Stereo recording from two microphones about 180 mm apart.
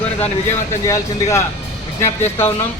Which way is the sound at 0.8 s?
15° left (ahead or behind).